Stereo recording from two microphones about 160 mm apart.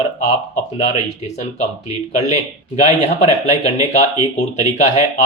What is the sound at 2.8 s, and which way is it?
Speech, 45° left (ahead or behind).